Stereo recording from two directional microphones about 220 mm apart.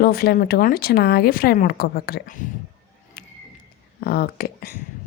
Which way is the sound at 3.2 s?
40° left (ahead or behind).